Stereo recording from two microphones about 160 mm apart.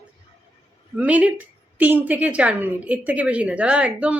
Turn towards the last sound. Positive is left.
turn(degrees=-10)  # may be behind; listen again after turning